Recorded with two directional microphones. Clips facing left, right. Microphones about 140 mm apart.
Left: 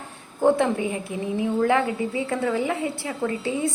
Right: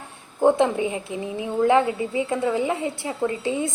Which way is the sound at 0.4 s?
20° right (ahead or behind).